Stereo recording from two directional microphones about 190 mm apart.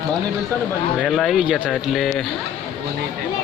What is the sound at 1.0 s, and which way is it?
Speech, centre (ahead or behind).